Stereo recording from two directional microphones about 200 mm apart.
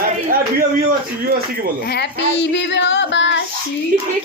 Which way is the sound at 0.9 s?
45° right (ahead or behind).